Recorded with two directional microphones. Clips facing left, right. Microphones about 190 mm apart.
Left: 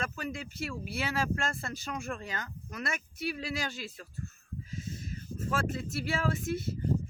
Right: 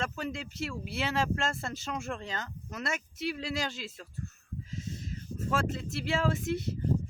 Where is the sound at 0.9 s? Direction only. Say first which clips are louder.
Right 2 dB; 20° right (ahead or behind).